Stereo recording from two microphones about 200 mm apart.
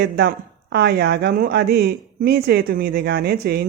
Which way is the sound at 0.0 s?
55° right (ahead or behind).